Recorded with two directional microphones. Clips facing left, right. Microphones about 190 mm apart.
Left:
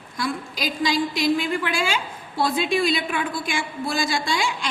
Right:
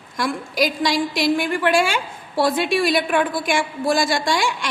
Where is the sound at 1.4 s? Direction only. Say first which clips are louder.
Right 6 dB; 60° right (ahead or behind).